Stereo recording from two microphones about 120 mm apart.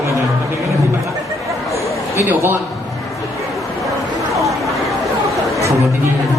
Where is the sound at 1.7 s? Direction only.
25° left (ahead or behind).